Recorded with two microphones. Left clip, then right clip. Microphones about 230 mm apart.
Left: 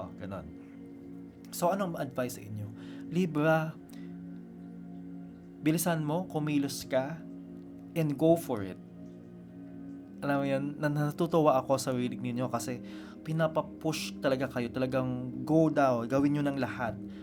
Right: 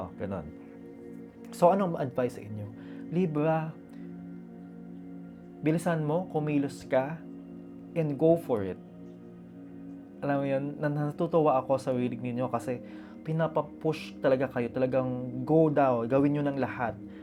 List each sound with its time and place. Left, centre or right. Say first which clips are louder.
0.0 s music: right 5 dB; centre
1.5 s speech: right 6 dB; centre
3.0 s speech: right 1 dB; centre
5.6 s speech: right 2 dB; centre
6.9 s speech: right 3 dB; centre
7.9 s speech: right 2 dB; centre
8.5 s speech: right 6 dB; centre
10.2 s speech: right 1 dB; centre